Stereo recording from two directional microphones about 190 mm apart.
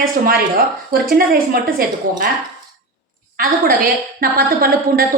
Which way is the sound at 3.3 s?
50° right (ahead or behind).